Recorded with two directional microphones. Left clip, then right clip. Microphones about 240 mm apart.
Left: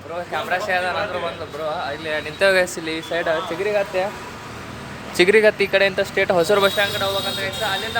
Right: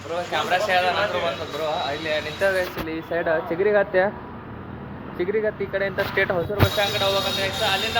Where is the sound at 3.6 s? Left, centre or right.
Centre.